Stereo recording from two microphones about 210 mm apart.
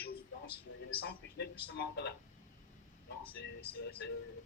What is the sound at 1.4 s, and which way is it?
Speech, 55° left (ahead or behind).